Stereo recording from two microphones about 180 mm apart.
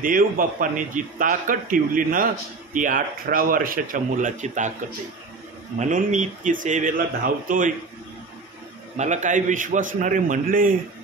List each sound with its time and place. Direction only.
0.0 s a man's voice: 50° right (ahead or behind)
5.8 s a man's voice: 40° right (ahead or behind)
8.9 s a man's voice: 40° right (ahead or behind)